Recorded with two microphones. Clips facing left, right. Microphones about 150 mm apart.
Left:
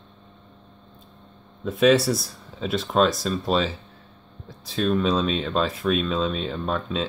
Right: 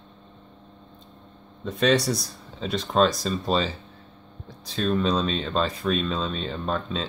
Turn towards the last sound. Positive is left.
turn(degrees=0)  # may be behind; listen again after turning